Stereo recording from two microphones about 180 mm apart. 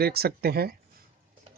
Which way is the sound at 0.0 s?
60° right (ahead or behind).